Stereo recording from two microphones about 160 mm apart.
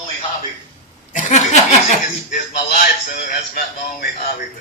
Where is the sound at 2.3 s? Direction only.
65° left (ahead or behind).